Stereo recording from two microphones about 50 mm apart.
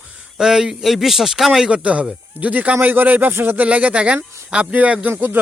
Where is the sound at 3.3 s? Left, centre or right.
Right.